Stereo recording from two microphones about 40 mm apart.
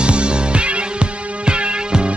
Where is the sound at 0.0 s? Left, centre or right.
Right.